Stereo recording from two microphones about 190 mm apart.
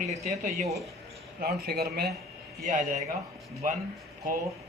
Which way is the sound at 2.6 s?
40° right (ahead or behind).